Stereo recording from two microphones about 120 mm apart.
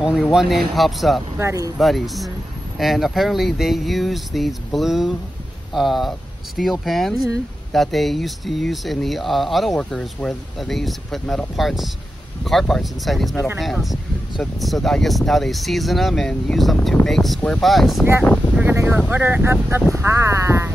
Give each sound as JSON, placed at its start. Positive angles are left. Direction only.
{"t": 0.0, "sound": "speech", "side_deg": -5}
{"t": 1.4, "sound": "speech", "side_deg": -25}
{"t": 1.8, "sound": "speech", "side_deg": 0}
{"t": 18.5, "sound": "speech", "side_deg": -15}